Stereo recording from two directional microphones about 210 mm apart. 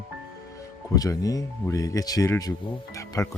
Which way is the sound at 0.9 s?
15° left (ahead or behind).